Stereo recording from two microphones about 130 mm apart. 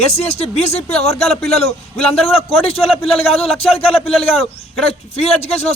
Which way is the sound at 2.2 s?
50° left (ahead or behind).